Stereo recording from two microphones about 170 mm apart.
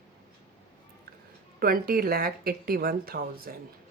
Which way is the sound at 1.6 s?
60° right (ahead or behind).